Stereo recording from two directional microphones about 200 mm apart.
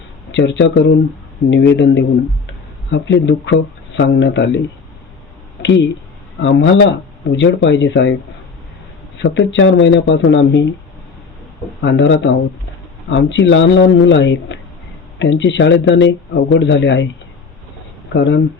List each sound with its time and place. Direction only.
0.3 s speech: 65° left (ahead or behind)
5.6 s speech: 65° left (ahead or behind)
9.2 s speech: 65° left (ahead or behind)
11.8 s speech: 65° left (ahead or behind)
18.1 s speech: 60° left (ahead or behind)